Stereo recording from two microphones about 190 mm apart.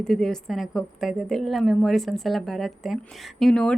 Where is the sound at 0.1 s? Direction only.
Centre (ahead or behind).